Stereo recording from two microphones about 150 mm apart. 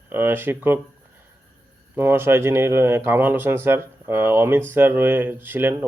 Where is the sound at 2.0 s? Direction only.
15° right (ahead or behind).